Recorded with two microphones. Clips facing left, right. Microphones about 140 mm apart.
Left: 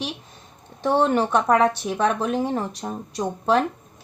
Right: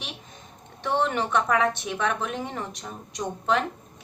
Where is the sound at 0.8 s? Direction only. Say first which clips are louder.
Left 6 dB; 40° left (ahead or behind).